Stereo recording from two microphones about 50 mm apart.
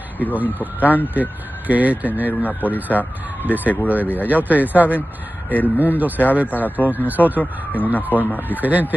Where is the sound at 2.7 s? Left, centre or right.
Right.